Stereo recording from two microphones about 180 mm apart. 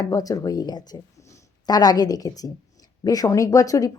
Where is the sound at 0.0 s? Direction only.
20° left (ahead or behind).